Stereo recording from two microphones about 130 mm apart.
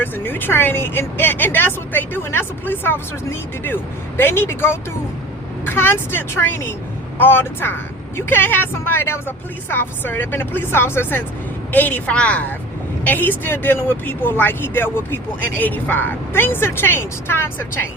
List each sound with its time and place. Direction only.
0.0 s speech: 15° left (ahead or behind)